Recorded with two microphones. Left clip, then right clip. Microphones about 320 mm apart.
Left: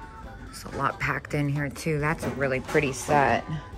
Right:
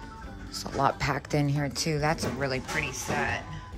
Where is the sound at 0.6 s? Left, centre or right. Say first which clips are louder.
Right 1 dB; centre.